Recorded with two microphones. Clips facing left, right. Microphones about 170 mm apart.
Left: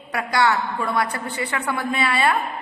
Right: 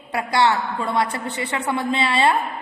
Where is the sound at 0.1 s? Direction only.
25° right (ahead or behind).